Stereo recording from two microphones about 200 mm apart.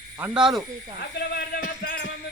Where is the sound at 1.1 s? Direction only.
50° left (ahead or behind).